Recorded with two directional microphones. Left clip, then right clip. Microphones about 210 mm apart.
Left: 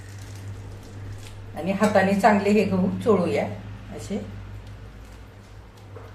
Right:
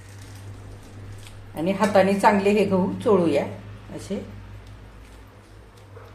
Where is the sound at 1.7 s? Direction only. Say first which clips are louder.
Right 1 dB; 45° right (ahead or behind).